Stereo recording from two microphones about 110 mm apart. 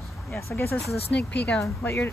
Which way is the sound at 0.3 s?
25° left (ahead or behind).